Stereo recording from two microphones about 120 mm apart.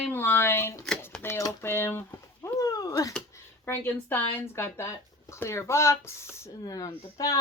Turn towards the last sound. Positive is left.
turn(degrees=30)  # may be behind; listen again after turning